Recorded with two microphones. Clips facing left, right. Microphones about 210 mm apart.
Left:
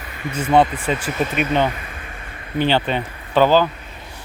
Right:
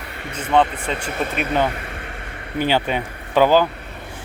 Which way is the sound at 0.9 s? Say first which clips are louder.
Left 2 dB; 55° right (ahead or behind).